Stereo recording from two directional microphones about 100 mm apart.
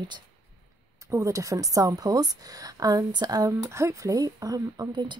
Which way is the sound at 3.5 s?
30° right (ahead or behind).